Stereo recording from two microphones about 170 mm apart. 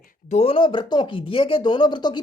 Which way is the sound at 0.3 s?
35° left (ahead or behind).